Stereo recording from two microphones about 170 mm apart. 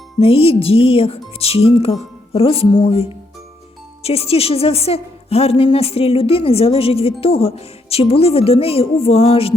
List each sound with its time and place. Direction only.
0.2 s a woman's voice: 35° left (ahead or behind)